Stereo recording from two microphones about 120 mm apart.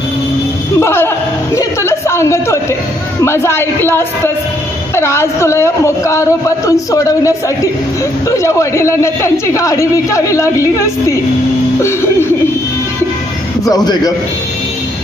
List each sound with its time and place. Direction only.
0.7 s chuckle: 20° left (ahead or behind)
3.3 s speech: 20° left (ahead or behind)
13.7 s a man's voice: 30° left (ahead or behind)